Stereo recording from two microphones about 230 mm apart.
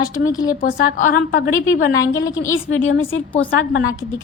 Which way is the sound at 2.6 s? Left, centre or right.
Left.